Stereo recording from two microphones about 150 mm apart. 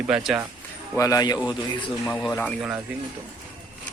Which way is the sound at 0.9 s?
25° left (ahead or behind).